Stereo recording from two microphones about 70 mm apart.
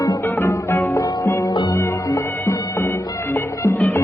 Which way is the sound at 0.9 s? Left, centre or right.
Left.